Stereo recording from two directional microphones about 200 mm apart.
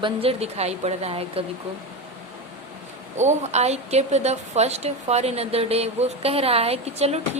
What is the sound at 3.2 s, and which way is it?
A woman's voice, 35° right (ahead or behind).